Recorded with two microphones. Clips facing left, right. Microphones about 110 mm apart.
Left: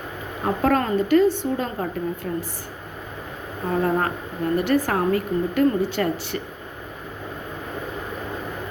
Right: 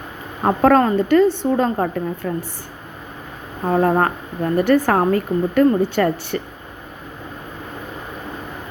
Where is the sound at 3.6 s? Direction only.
45° right (ahead or behind).